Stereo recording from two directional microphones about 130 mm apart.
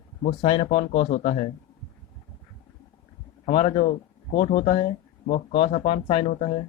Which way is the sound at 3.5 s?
50° left (ahead or behind).